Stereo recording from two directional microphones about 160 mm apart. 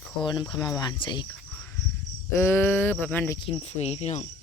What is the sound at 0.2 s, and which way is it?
Speech, 30° left (ahead or behind).